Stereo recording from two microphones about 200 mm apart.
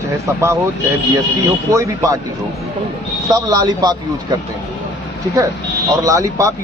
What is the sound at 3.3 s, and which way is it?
Speech, 20° right (ahead or behind).